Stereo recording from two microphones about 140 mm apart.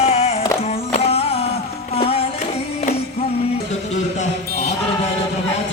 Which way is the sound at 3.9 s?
50° left (ahead or behind).